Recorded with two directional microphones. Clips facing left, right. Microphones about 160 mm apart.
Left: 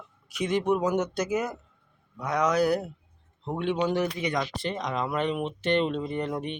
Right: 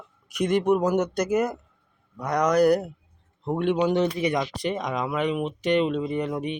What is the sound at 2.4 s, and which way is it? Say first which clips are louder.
Speech: right 5 dB; 15° right (ahead or behind).